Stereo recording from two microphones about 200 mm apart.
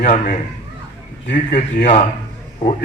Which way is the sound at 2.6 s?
30° left (ahead or behind).